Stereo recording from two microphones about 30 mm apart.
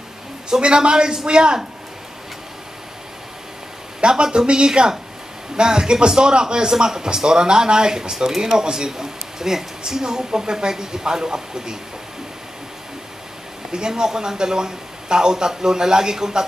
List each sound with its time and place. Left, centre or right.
0.5 s speech: right
4.0 s speech: right
13.7 s speech: right